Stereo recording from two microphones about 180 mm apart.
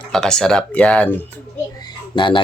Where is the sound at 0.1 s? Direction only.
5° left (ahead or behind).